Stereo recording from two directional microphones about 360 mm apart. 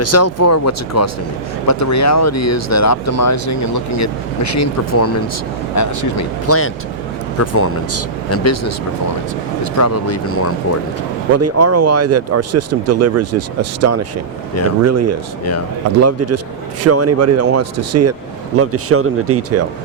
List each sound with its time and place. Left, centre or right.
0.0 s speech: left
9.7 s speech: left
11.3 s speech: right